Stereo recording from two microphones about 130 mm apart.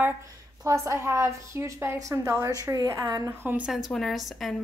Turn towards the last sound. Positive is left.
turn(degrees=0)  # may be behind; listen again after turning